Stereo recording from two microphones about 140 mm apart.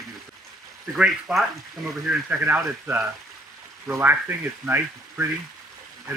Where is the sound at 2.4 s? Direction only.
15° right (ahead or behind).